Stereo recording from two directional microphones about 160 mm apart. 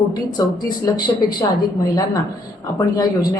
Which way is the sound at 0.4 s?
25° left (ahead or behind).